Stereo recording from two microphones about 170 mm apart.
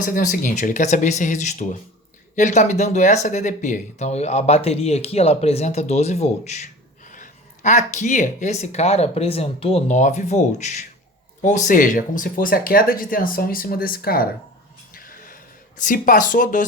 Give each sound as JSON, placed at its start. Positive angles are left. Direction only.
{"t": 0.0, "sound": "speech", "side_deg": 50}
{"t": 14.9, "sound": "a sound", "side_deg": 55}
{"t": 15.8, "sound": "speech", "side_deg": 50}